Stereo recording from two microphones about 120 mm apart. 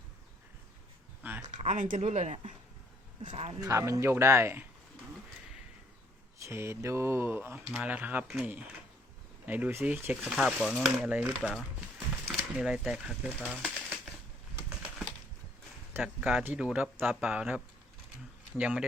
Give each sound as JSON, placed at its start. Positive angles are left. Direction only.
{"t": 1.2, "sound": "a sound", "side_deg": -15}
{"t": 1.6, "sound": "speech", "side_deg": -90}
{"t": 3.6, "sound": "speech", "side_deg": -25}
{"t": 6.4, "sound": "speech", "side_deg": -20}
{"t": 7.6, "sound": "speech", "side_deg": -5}
{"t": 15.9, "sound": "speech", "side_deg": -10}